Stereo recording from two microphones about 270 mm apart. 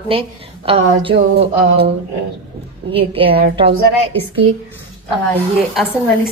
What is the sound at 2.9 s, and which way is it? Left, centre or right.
Speech, centre.